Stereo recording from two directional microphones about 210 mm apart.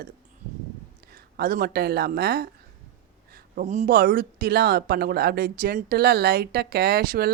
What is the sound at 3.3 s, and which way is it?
Speech, 35° right (ahead or behind).